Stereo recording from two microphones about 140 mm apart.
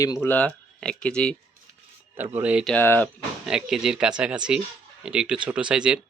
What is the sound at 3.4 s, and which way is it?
Speech, 5° right (ahead or behind).